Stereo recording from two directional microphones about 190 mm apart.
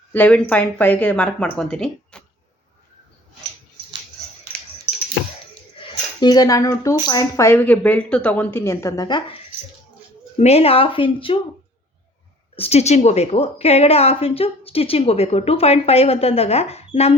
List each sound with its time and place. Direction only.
0.1 s a woman's voice: 10° left (ahead or behind)
5.8 s a woman's voice: 20° left (ahead or behind)
10.3 s speech: 35° left (ahead or behind)
12.5 s a woman's voice: 30° left (ahead or behind)